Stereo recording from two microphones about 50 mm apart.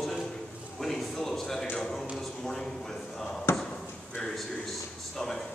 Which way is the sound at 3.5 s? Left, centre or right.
Left.